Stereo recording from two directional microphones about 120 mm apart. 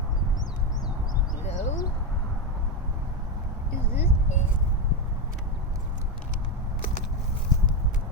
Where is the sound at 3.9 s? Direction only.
80° left.